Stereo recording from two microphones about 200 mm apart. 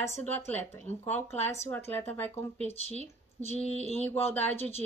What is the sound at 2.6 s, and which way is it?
Speech, 30° left (ahead or behind).